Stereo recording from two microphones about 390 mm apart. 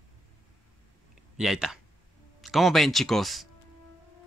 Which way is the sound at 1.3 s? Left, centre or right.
Centre.